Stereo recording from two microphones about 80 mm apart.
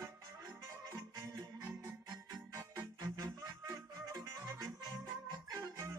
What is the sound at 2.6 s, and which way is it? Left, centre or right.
Music, right.